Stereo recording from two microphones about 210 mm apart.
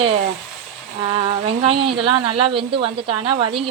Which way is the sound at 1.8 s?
25° right (ahead or behind).